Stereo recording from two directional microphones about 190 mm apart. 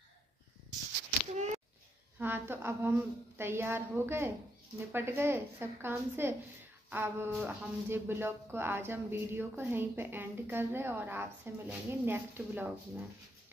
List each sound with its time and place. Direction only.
2.1 s speech: 10° right (ahead or behind)